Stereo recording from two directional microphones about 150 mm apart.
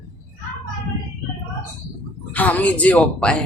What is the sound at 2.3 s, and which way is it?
Speech, 10° left (ahead or behind).